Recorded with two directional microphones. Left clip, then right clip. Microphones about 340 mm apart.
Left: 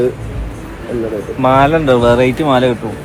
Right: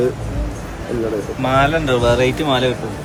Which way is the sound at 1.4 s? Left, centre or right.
Centre.